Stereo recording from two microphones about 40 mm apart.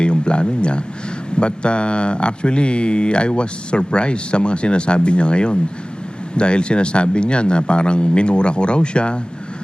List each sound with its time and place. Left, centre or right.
0.0 s speech: left